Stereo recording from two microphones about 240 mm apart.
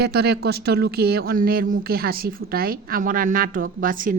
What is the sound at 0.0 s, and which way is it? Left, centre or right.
Speech, right.